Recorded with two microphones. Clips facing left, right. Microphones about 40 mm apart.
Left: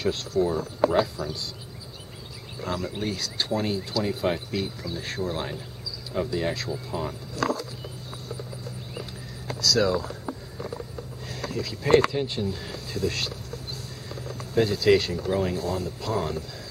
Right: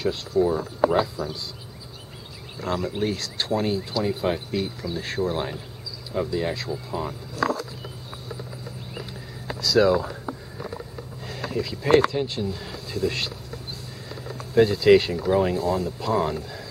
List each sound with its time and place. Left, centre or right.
0.4 s speech: centre
2.6 s speech: centre
9.6 s speech: centre
11.2 s speech: centre
13.0 s speech: centre
14.5 s speech: centre